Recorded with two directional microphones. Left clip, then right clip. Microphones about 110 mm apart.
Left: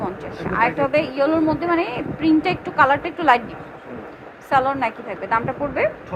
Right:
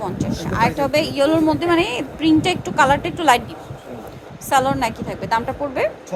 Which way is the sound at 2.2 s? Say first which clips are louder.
Right 1 dB; 90° right.